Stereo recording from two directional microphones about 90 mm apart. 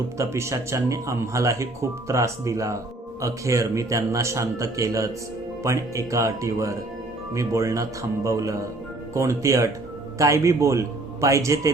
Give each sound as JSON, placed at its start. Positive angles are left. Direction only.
{"t": 0.2, "sound": "speech", "side_deg": -35}